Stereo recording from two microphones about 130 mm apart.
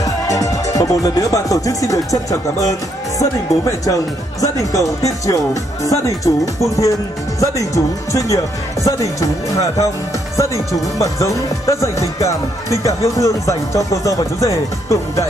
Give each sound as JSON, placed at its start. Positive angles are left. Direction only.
{"t": 0.0, "sound": "music", "side_deg": 25}
{"t": 3.2, "sound": "speech", "side_deg": 25}